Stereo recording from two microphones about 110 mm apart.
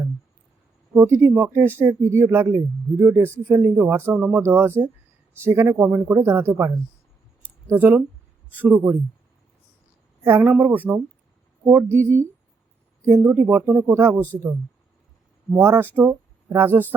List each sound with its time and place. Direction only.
0.9 s speech: 25° right (ahead or behind)
7.8 s speech: 15° right (ahead or behind)
10.2 s speech: 20° right (ahead or behind)
15.5 s speech: 20° right (ahead or behind)